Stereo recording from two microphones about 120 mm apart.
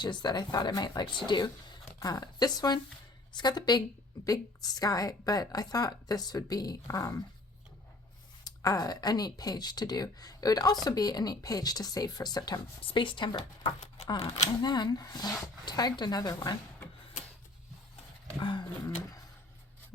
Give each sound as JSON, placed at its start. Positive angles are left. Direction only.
{"t": 0.0, "sound": "speech", "side_deg": 35}
{"t": 2.0, "sound": "speech", "side_deg": 30}
{"t": 8.4, "sound": "a woman's voice", "side_deg": 30}
{"t": 13.7, "sound": "a sound", "side_deg": 75}
{"t": 14.1, "sound": "speech", "side_deg": 30}
{"t": 18.3, "sound": "speech", "side_deg": 40}